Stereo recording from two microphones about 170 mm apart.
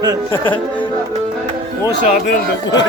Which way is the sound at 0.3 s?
30° left (ahead or behind).